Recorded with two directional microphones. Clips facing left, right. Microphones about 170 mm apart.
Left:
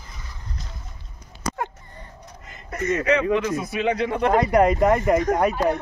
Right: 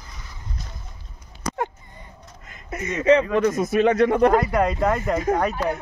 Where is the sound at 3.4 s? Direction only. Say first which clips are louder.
Right 5 dB; 45° right (ahead or behind).